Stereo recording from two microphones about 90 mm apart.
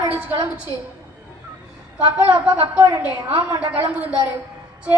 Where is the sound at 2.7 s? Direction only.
25° right (ahead or behind).